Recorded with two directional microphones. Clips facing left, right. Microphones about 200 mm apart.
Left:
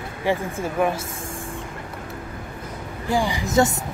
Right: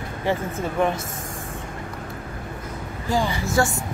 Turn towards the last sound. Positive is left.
turn(degrees=20)  # may be behind; listen again after turning